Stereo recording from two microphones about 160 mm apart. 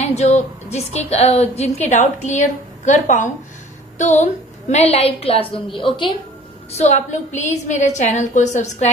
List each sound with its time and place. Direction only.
0.0 s a woman's voice: 45° left (ahead or behind)
4.0 s a woman's voice: 45° left (ahead or behind)
6.8 s a woman's voice: 50° left (ahead or behind)